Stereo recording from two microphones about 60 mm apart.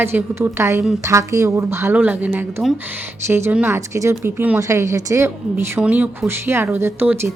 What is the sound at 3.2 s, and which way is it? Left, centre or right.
Speech, right.